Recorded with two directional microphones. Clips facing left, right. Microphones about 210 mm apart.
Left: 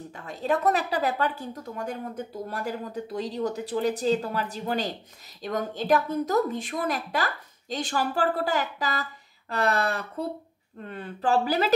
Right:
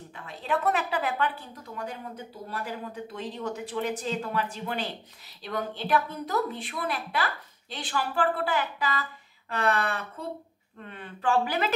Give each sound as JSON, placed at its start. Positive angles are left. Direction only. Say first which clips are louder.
{"t": 0.3, "sound": "a woman's voice", "louder": "left 3 dB", "side_deg": 40}